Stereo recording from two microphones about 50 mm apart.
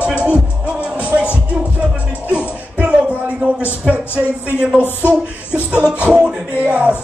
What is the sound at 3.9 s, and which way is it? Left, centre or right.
Speech, right.